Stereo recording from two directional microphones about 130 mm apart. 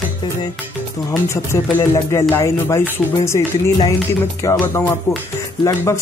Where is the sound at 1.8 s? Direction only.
25° left (ahead or behind).